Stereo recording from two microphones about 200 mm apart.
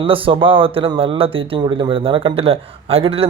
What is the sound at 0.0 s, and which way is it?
Speech, 25° right (ahead or behind).